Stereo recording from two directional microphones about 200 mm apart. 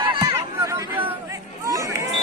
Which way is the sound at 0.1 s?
20° right (ahead or behind).